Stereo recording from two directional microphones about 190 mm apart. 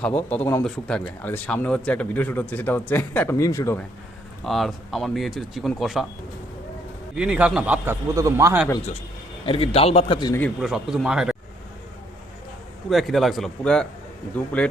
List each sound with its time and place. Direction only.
0.2 s speech: 10° left (ahead or behind)
4.4 s speech: centre (ahead or behind)
7.2 s a man's voice: 5° right (ahead or behind)
9.5 s a man's voice: 30° left (ahead or behind)
10.6 s speech: centre (ahead or behind)
12.9 s speech: centre (ahead or behind)